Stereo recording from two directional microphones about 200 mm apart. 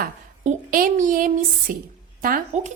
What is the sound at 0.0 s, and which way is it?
A woman's voice, 45° right (ahead or behind).